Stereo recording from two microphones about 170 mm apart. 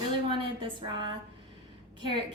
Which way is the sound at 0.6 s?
25° right (ahead or behind).